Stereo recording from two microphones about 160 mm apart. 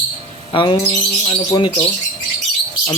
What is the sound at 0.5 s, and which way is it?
Speech, 30° left (ahead or behind).